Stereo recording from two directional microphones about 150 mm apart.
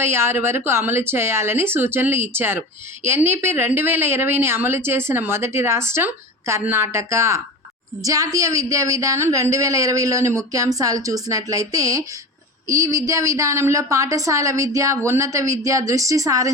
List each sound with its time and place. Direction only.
0.0 s a woman's voice: 15° right (ahead or behind)